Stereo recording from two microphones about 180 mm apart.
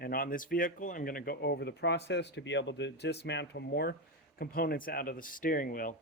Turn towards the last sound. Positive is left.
turn(degrees=50)  # may be behind; listen again after turning